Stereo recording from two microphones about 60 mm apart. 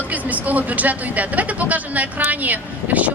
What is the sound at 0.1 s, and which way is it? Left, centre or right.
Speech, right.